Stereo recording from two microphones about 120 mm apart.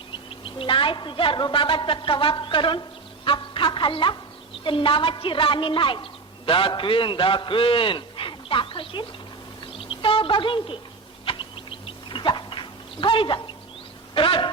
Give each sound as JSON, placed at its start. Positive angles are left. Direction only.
{"t": 0.1, "sound": "a woman's voice", "side_deg": 45}
{"t": 9.7, "sound": "a sound", "side_deg": 45}
{"t": 11.3, "sound": "dog", "side_deg": 45}
{"t": 14.1, "sound": "speech", "side_deg": 45}